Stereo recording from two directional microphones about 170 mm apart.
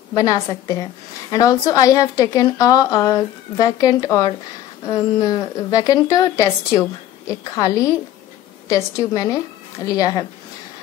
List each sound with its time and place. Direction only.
0.1 s a woman's voice: 20° left (ahead or behind)